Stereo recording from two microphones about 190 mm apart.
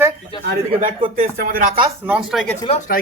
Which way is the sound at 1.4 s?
50° right (ahead or behind).